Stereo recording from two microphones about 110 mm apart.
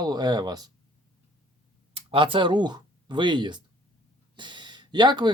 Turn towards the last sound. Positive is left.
turn(degrees=-45)  # may be behind; listen again after turning